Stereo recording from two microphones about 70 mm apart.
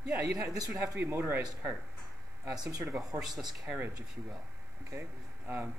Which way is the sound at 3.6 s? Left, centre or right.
Right.